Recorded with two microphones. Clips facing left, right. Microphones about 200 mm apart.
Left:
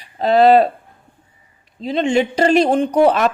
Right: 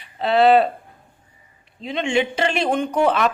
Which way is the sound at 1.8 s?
35° left (ahead or behind).